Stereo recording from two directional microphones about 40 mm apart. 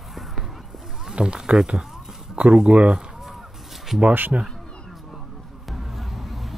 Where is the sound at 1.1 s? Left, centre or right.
Right.